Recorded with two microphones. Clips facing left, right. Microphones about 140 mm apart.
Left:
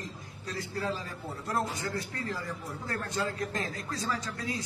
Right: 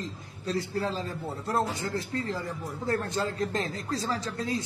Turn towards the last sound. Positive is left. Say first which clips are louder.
# right 4 dB
turn(degrees=-25)  # may be behind; listen again after turning